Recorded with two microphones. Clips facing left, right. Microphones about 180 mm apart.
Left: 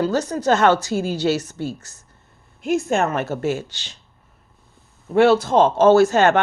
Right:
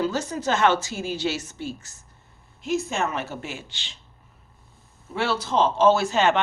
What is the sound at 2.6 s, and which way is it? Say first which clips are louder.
Speech: left 6 dB; 55° left (ahead or behind).